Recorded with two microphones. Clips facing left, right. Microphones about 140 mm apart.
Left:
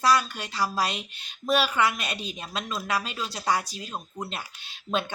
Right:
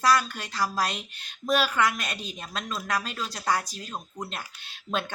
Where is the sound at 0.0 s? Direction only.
Centre (ahead or behind).